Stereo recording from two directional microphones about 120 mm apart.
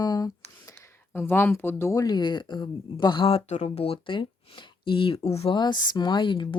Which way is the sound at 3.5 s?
60° left (ahead or behind).